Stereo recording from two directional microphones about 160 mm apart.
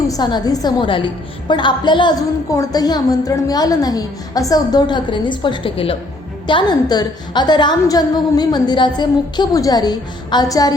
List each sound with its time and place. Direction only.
0.1 s a woman's voice: 25° left (ahead or behind)